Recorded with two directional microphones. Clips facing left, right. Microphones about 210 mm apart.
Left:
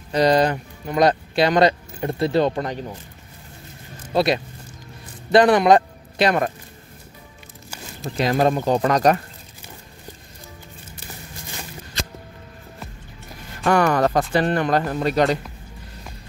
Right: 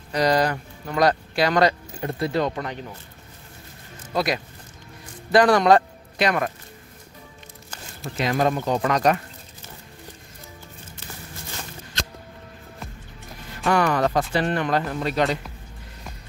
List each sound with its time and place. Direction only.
0.1 s speech: 25° left (ahead or behind)
4.1 s speech: 30° left (ahead or behind)
6.1 s speech: 30° left (ahead or behind)
8.2 s speech: 35° left (ahead or behind)
13.7 s speech: 45° left (ahead or behind)